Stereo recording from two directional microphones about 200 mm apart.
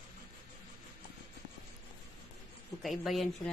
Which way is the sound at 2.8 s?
Centre (ahead or behind).